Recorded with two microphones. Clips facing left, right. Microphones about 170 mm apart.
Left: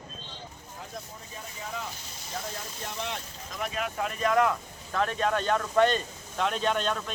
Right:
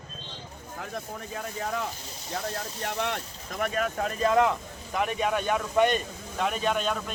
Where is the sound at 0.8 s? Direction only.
65° right (ahead or behind).